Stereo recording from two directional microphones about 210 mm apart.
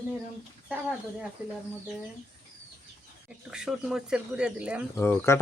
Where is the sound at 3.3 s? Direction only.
5° right (ahead or behind).